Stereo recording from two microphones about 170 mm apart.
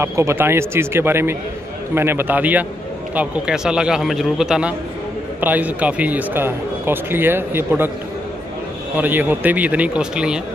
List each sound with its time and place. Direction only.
0.0 s a man's voice: 15° right (ahead or behind)
8.9 s speech: 10° right (ahead or behind)